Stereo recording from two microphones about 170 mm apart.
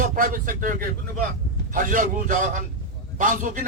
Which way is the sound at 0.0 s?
50° right (ahead or behind).